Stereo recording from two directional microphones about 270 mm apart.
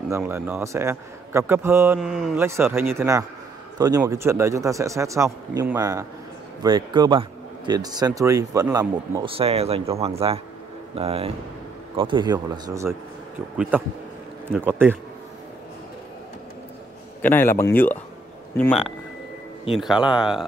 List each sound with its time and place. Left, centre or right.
0.1 s a man's voice: centre
17.2 s speech: centre